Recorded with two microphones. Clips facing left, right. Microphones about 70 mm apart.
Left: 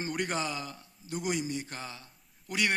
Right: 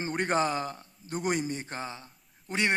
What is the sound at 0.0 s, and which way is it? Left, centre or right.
A man's voice, right.